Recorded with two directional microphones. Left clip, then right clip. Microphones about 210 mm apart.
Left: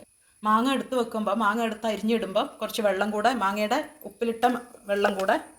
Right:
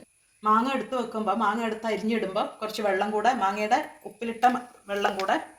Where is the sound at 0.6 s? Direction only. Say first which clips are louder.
Left 2 dB; 50° left (ahead or behind).